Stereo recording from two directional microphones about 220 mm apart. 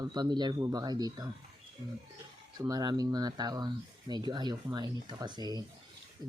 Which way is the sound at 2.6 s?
20° right (ahead or behind).